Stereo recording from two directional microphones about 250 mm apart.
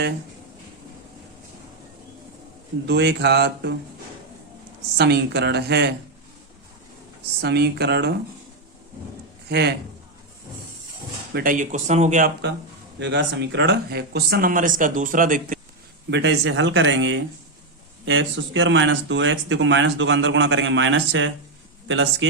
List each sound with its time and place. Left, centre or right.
2.8 s speech: right
4.9 s speech: right
7.4 s speech: right
9.5 s speech: right
11.3 s speech: right
13.0 s speech: right
16.0 s speech: right